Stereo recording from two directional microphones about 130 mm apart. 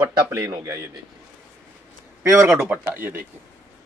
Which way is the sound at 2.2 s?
20° right (ahead or behind).